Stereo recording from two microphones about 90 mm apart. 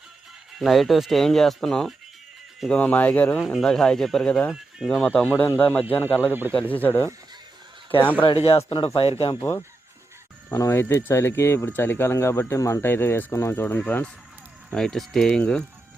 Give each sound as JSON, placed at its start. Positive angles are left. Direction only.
{"t": 0.6, "sound": "speech", "side_deg": 0}
{"t": 3.4, "sound": "speech", "side_deg": 5}
{"t": 5.3, "sound": "speech", "side_deg": 25}
{"t": 6.5, "sound": "speech", "side_deg": 15}
{"t": 8.2, "sound": "speech", "side_deg": 80}
{"t": 9.4, "sound": "speech", "side_deg": 25}
{"t": 10.7, "sound": "speech", "side_deg": 30}
{"t": 14.7, "sound": "speech", "side_deg": 5}